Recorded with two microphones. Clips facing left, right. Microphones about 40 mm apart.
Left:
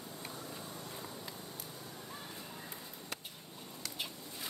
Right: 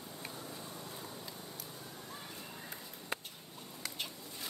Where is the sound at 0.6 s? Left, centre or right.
Centre.